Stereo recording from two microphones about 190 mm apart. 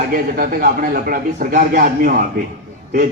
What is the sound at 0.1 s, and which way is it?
A man's voice, 50° right (ahead or behind).